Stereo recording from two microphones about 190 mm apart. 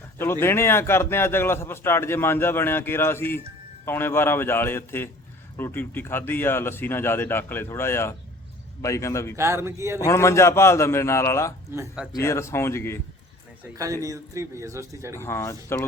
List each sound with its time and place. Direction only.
0.2 s a man's voice: 10° left (ahead or behind)
9.3 s a man's voice: 15° right (ahead or behind)
10.1 s a man's voice: 15° left (ahead or behind)
14.0 s a man's voice: 15° right (ahead or behind)
15.2 s a man's voice: 15° left (ahead or behind)